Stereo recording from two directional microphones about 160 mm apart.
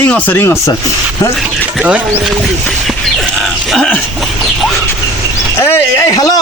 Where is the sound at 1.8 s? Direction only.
10° right (ahead or behind).